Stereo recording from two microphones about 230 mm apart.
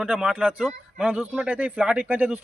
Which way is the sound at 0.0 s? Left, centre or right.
Centre.